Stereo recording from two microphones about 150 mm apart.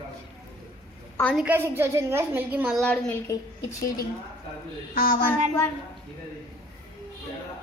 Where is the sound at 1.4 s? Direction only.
15° right (ahead or behind).